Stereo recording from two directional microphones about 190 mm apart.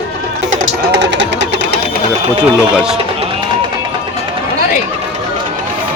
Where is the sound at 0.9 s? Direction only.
70° right (ahead or behind).